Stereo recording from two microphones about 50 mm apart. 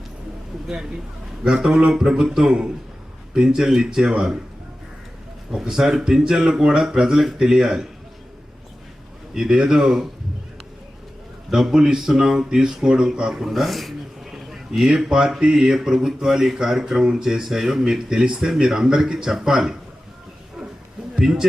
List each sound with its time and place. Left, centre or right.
1.5 s speech: centre
5.5 s speech: centre
9.3 s speech: centre
11.5 s speech: centre
21.2 s speech: centre